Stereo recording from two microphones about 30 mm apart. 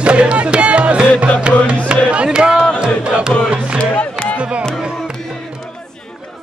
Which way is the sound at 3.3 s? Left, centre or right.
Left.